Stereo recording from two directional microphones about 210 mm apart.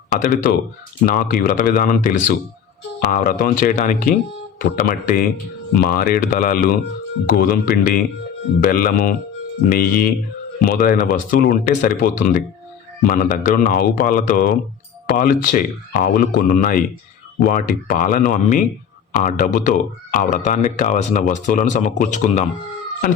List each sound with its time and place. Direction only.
0.1 s speech: 40° left (ahead or behind)